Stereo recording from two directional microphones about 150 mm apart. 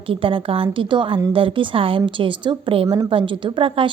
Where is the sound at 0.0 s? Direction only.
35° right (ahead or behind).